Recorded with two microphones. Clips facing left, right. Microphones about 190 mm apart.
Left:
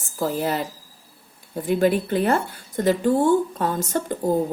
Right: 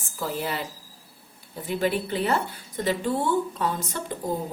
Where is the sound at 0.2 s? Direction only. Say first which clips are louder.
Left 6 dB; 40° left (ahead or behind).